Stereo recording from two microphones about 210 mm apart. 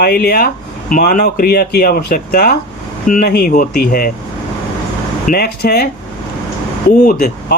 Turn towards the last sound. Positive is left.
turn(degrees=50)  # may be behind; listen again after turning